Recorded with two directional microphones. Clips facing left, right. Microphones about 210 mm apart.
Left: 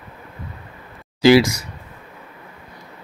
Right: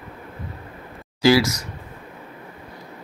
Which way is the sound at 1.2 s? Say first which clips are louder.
Left 4 dB; 20° left (ahead or behind).